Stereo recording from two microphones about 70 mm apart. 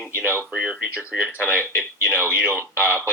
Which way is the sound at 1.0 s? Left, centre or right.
Centre.